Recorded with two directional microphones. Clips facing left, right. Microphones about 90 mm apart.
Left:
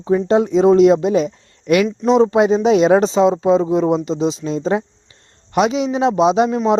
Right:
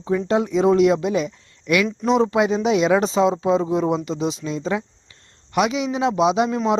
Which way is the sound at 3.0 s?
25° left (ahead or behind).